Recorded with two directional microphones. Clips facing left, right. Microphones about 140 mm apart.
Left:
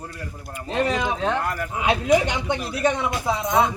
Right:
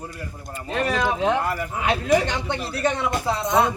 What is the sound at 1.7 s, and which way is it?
Speech, 15° left (ahead or behind).